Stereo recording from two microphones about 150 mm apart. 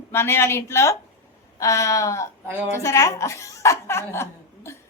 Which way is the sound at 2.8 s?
20° left (ahead or behind).